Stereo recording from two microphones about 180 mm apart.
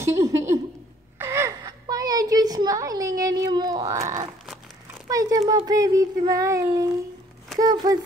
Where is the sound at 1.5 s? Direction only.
20° right (ahead or behind).